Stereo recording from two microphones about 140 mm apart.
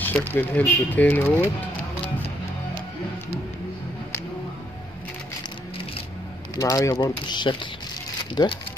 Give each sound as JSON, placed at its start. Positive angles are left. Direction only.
{"t": 0.3, "sound": "speech", "side_deg": 10}
{"t": 6.5, "sound": "speech", "side_deg": 25}